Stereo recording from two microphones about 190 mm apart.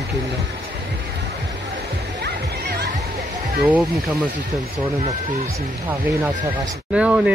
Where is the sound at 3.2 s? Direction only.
35° right (ahead or behind).